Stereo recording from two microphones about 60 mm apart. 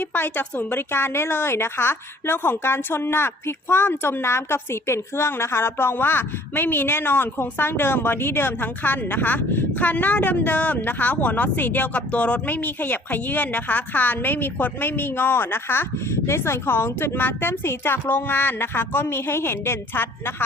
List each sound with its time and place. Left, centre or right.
0.0 s a woman's voice: left